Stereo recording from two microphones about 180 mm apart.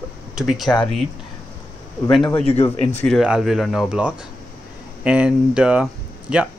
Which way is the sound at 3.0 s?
Centre (ahead or behind).